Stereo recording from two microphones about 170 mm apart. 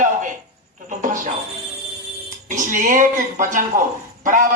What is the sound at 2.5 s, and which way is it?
A man's voice, 50° right (ahead or behind).